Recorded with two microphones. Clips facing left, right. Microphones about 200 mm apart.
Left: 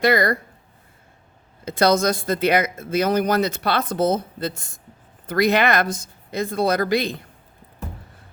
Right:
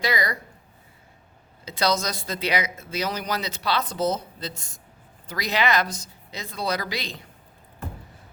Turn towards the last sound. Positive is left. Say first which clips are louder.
# left 10 dB
turn(degrees=55)  # may be behind; listen again after turning